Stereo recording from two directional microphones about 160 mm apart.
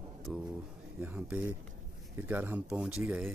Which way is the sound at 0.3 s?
10° right (ahead or behind).